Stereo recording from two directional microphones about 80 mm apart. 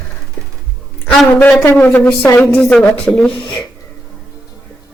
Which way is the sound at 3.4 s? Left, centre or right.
Left.